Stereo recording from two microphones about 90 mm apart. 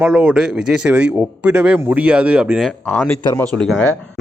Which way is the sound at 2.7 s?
15° left (ahead or behind).